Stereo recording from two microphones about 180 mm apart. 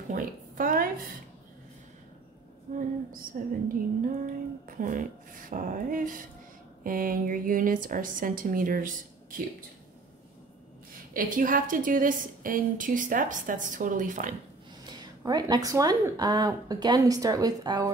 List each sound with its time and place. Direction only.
0.1 s a sound: 50° right (ahead or behind)
2.7 s a woman's voice: 50° right (ahead or behind)
11.1 s a woman's voice: 50° right (ahead or behind)
14.9 s speech: 25° right (ahead or behind)